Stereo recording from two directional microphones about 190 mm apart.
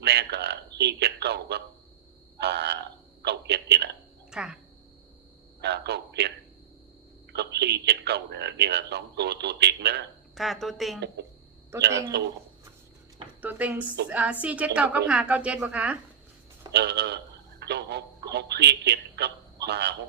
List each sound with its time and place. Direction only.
0.0 s a man's voice: 60° right (ahead or behind)
4.3 s speech: 5° right (ahead or behind)
5.5 s a man's voice: 60° right (ahead or behind)
7.3 s a man's voice: 60° right (ahead or behind)
10.3 s a woman's voice: centre (ahead or behind)
11.8 s a man's voice: 60° right (ahead or behind)
13.4 s a woman's voice: 10° right (ahead or behind)
16.7 s a man's voice: 60° right (ahead or behind)